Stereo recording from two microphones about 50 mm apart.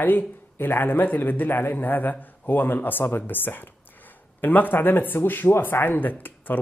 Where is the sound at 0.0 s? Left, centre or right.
Left.